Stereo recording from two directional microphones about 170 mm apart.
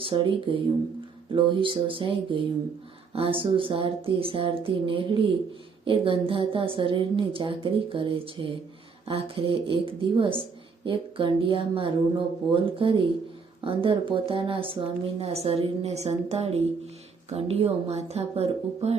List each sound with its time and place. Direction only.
0.0 s a woman's voice: 30° right (ahead or behind)